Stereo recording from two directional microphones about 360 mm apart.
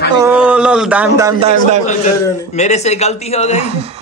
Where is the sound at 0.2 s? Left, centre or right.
Centre.